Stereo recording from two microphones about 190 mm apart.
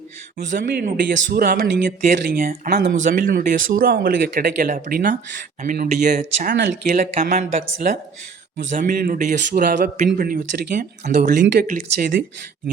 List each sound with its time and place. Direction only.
0.5 s speech: 45° right (ahead or behind)
8.7 s speech: 50° right (ahead or behind)